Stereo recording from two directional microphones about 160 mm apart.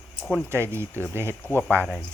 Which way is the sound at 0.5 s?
15° right (ahead or behind).